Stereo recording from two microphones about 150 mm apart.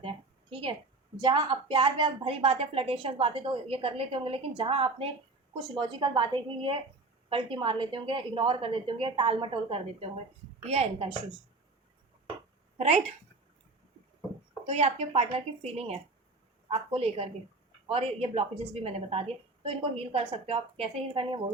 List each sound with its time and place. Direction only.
0.5 s a woman's voice: 35° right (ahead or behind)
12.7 s speech: 45° right (ahead or behind)
14.7 s a woman's voice: 45° right (ahead or behind)